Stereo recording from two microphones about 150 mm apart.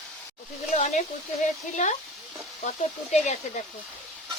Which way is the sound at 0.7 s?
50° left (ahead or behind).